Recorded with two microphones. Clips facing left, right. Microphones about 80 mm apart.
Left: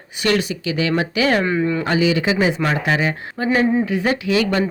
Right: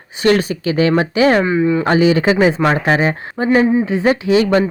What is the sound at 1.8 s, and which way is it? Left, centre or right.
Speech, right.